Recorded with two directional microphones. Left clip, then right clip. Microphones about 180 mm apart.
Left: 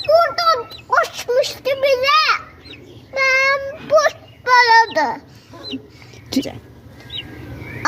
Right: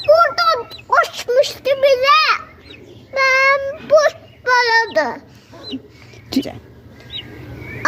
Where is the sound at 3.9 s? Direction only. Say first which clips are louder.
Right 2 dB; 10° right (ahead or behind).